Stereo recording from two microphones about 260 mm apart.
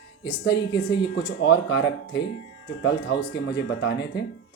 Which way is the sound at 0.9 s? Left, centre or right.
Left.